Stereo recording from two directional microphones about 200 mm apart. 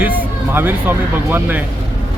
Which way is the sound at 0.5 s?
10° right (ahead or behind).